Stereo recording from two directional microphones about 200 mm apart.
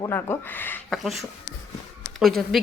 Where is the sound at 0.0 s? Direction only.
10° left (ahead or behind).